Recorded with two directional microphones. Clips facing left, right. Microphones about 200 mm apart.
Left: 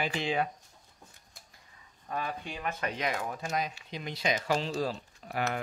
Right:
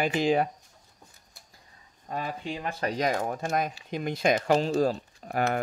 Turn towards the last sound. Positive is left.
turn(degrees=-45)  # may be behind; listen again after turning